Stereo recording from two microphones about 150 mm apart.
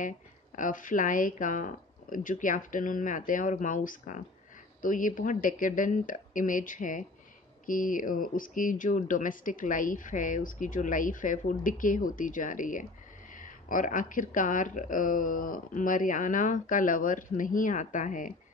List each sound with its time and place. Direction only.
0.6 s speech: 60° left (ahead or behind)